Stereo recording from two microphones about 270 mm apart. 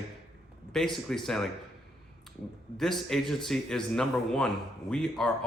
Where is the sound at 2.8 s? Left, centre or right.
Centre.